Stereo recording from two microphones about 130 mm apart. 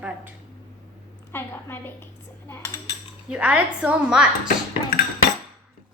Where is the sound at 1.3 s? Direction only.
15° left (ahead or behind).